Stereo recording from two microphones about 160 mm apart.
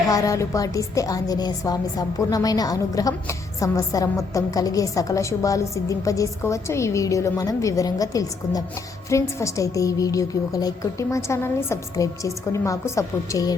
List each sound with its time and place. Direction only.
0.1 s a woman's voice: 20° left (ahead or behind)